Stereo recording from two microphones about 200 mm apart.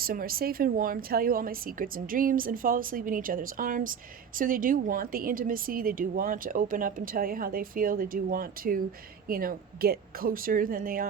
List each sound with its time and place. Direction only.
0.0 s a woman's voice: 45° right (ahead or behind)